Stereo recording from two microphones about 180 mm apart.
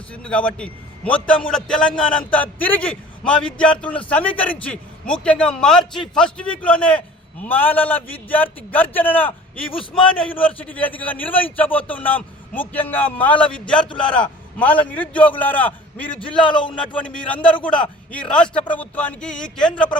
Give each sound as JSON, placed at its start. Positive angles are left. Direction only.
{"t": 0.1, "sound": "a man's voice", "side_deg": 5}
{"t": 5.8, "sound": "a man's voice", "side_deg": 25}
{"t": 6.1, "sound": "a man's voice", "side_deg": 5}
{"t": 16.2, "sound": "a man's voice", "side_deg": 25}
{"t": 16.9, "sound": "a man's voice", "side_deg": 5}